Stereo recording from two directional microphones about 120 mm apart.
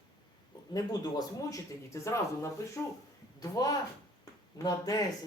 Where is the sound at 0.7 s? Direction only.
30° left (ahead or behind).